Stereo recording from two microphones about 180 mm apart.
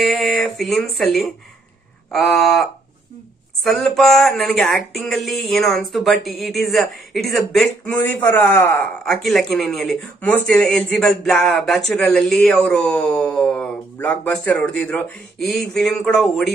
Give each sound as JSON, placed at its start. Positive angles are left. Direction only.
{"t": 0.0, "sound": "speech", "side_deg": 0}